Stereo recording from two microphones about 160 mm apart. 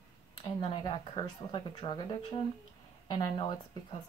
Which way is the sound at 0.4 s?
25° left (ahead or behind).